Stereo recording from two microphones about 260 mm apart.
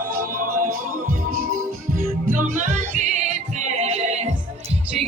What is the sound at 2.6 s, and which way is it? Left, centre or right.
Music, right.